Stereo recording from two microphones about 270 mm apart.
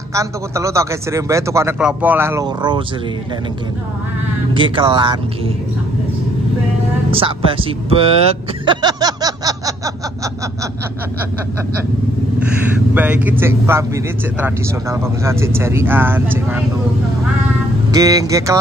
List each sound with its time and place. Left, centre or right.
0.1 s a man's voice: centre
4.6 s speech: centre
7.1 s speech: centre
12.9 s a man's voice: centre
17.9 s a man's voice: centre